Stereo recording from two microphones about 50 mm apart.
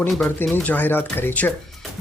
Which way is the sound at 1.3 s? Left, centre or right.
Left.